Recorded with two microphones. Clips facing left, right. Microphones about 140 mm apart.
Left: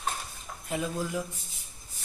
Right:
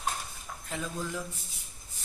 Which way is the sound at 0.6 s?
15° left (ahead or behind).